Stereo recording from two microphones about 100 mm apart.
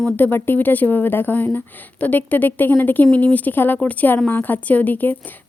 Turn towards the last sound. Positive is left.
turn(degrees=15)  # may be behind; listen again after turning